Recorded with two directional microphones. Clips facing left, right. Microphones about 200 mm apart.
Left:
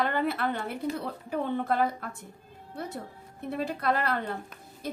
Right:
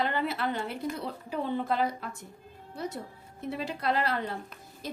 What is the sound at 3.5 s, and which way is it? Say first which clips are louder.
Speech: left 2 dB; 55° left (ahead or behind).